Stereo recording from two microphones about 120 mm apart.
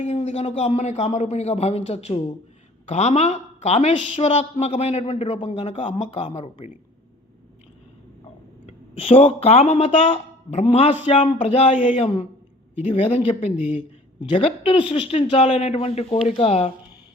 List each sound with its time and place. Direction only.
0.0 s speech: 70° left (ahead or behind)
4.3 s speech: 70° left (ahead or behind)
4.7 s speech: 60° left (ahead or behind)
8.6 s a woman's voice: 55° left (ahead or behind)
11.7 s speech: 90° left
12.9 s a woman's voice: 55° left (ahead or behind)
15.3 s speech: 60° left (ahead or behind)